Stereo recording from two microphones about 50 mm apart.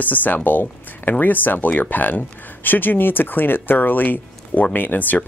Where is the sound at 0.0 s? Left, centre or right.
Left.